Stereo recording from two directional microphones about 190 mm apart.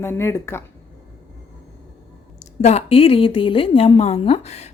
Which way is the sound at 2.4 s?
35° left (ahead or behind).